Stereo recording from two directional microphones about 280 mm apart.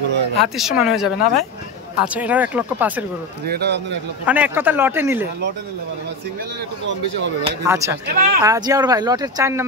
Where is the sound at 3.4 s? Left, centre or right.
Right.